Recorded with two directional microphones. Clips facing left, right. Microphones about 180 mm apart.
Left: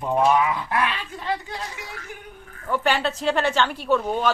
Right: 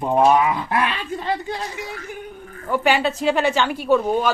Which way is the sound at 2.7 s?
10° right (ahead or behind).